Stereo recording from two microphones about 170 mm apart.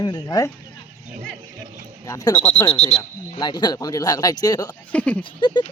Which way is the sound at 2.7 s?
40° left (ahead or behind).